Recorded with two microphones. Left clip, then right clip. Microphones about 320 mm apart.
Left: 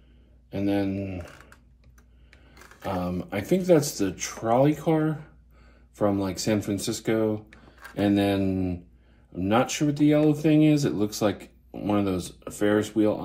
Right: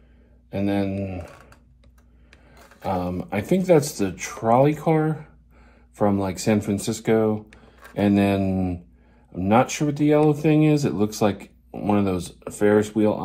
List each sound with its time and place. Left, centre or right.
0.5 s speech: right
3.0 s speech: right
7.9 s speech: right